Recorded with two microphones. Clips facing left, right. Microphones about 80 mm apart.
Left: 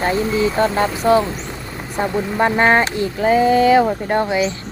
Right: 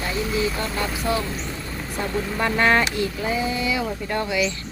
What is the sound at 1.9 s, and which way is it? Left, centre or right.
Speech, left.